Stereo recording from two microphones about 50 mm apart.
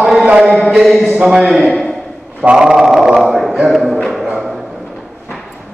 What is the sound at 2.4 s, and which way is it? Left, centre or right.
Mantra, centre.